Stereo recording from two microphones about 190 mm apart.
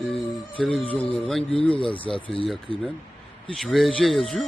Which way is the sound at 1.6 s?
30° left (ahead or behind).